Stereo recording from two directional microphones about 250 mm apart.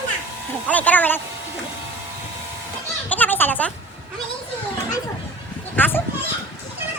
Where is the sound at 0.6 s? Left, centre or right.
Centre.